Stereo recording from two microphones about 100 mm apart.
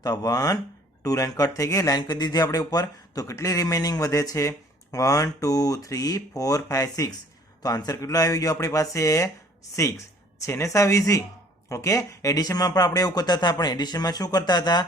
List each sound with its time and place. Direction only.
0.0 s speech: 40° left (ahead or behind)
10.4 s speech: 30° left (ahead or behind)